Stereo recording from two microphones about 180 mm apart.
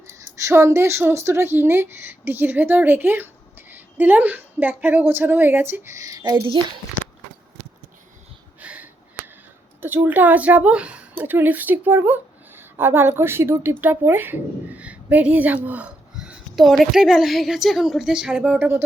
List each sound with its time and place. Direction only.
0.1 s a woman's voice: 15° right (ahead or behind)
8.6 s a sound: 10° right (ahead or behind)
9.8 s a woman's voice: 10° right (ahead or behind)